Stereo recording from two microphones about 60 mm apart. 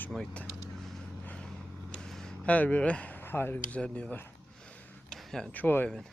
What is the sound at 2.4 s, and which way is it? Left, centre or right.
Speech, left.